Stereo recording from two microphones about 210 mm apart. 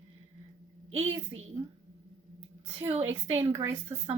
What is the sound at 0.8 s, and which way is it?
Speech, 75° right (ahead or behind).